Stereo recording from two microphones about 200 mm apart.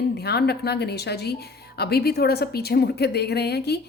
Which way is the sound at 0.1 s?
55° left (ahead or behind).